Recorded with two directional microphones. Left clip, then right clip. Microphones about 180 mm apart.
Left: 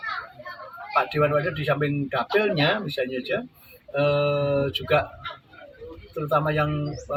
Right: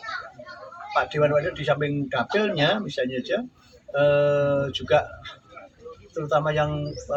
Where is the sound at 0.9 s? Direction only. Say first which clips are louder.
Even; 10° right (ahead or behind).